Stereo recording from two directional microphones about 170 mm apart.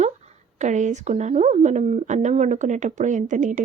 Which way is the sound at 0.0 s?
45° right (ahead or behind).